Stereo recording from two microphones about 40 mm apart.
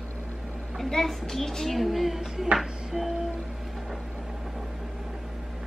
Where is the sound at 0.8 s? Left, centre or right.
Centre.